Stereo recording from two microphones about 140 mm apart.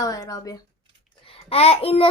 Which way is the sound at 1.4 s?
45° left (ahead or behind).